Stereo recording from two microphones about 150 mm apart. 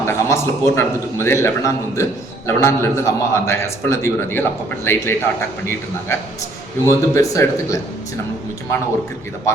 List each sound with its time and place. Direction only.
0.0 s a man's voice: 15° left (ahead or behind)
6.8 s speech: 20° left (ahead or behind)